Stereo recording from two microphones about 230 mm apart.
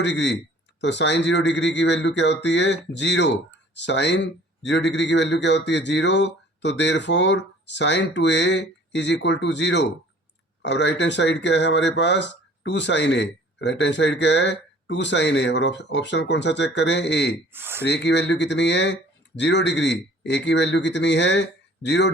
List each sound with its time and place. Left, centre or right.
0.0 s speech: left
17.5 s speech: centre
17.8 s speech: left